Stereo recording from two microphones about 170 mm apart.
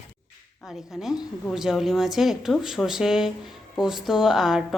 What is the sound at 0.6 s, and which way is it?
Speech, centre (ahead or behind).